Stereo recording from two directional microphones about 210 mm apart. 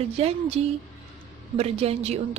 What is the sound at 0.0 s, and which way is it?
Speech, 30° right (ahead or behind).